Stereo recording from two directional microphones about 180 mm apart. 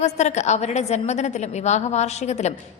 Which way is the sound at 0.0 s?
40° left (ahead or behind).